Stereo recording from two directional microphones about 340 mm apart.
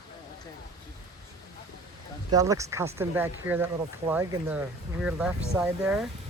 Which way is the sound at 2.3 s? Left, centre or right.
Centre.